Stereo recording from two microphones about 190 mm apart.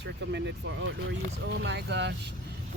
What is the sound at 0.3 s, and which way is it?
Speech, 65° right (ahead or behind).